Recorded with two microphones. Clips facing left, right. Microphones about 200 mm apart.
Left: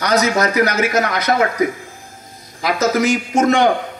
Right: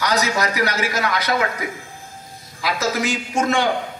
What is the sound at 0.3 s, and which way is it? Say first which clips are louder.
A man's voice: left 5 dB; 50° left (ahead or behind).